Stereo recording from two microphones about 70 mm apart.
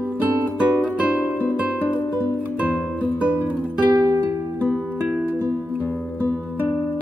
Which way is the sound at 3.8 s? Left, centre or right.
Right.